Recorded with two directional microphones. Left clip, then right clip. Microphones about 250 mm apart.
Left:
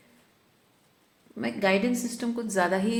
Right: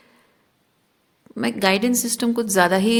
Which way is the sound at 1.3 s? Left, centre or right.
Right.